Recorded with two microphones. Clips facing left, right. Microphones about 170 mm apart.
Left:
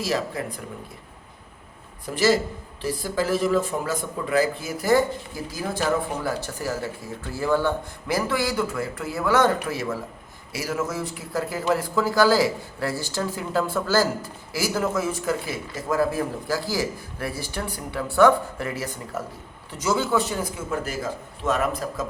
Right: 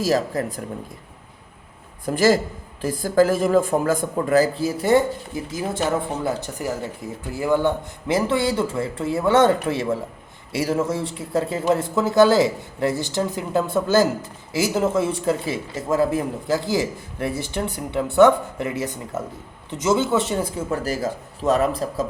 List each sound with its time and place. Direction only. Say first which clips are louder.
0.0 s speech: right 5 dB; 40° right (ahead or behind)
2.0 s a man's voice: right 3 dB; 45° right (ahead or behind); by 22.0 s 30° right (ahead or behind)